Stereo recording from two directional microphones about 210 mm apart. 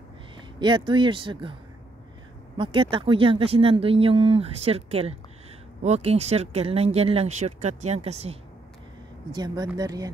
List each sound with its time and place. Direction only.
0.6 s speech: 20° right (ahead or behind)
9.3 s speech: 20° right (ahead or behind)